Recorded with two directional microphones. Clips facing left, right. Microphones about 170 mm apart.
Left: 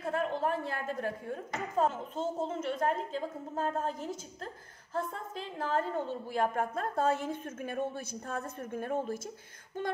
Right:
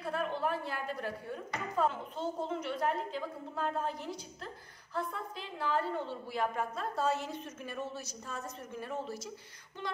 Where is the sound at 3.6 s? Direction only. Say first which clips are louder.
Left 2 dB; 45° left (ahead or behind).